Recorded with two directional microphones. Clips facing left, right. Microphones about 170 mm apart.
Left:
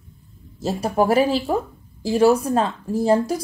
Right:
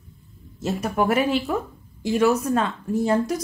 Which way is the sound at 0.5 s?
35° left (ahead or behind).